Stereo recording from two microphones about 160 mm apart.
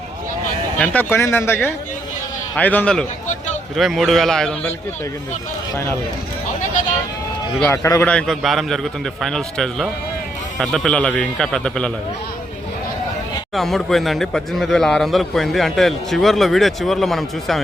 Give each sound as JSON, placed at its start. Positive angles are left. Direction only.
{"t": 0.8, "sound": "speech", "side_deg": 10}
{"t": 5.7, "sound": "speech", "side_deg": 15}
{"t": 7.7, "sound": "speech", "side_deg": 15}
{"t": 8.1, "sound": "speech", "side_deg": 0}
{"t": 13.5, "sound": "speech", "side_deg": 0}